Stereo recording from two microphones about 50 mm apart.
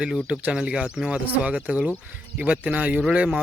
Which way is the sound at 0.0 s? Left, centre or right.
Right.